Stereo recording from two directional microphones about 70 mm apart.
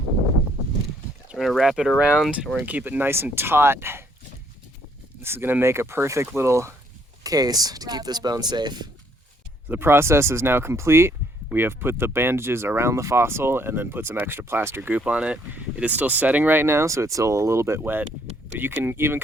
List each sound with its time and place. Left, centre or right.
1.4 s speech: centre
2.6 s speech: right
5.2 s speech: right
7.3 s speech: right
9.6 s speech: right
14.8 s speech: right